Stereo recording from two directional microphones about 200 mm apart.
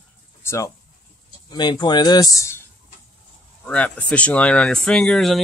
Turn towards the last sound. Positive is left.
turn(degrees=0)  # may be behind; listen again after turning